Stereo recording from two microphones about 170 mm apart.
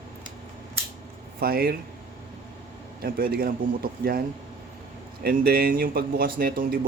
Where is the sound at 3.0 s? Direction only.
60° right (ahead or behind).